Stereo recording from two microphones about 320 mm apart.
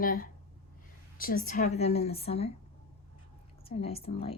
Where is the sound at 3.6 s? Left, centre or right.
Centre.